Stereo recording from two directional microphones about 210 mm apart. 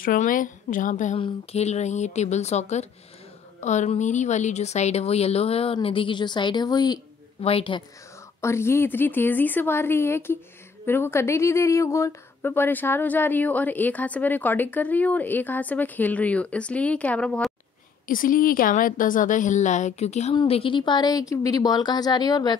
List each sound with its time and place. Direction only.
0.0 s a woman's voice: 40° left (ahead or behind)
8.4 s speech: 10° left (ahead or behind)
18.0 s a woman's voice: 40° left (ahead or behind); by 22.6 s 20° left (ahead or behind)